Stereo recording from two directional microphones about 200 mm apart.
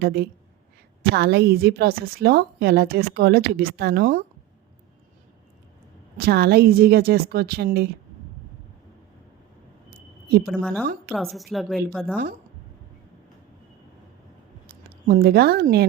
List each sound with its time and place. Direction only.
0.0 s a woman's voice: 50° right (ahead or behind)
6.1 s a woman's voice: 50° right (ahead or behind)
10.4 s a woman's voice: 5° left (ahead or behind)
15.0 s a woman's voice: 50° right (ahead or behind)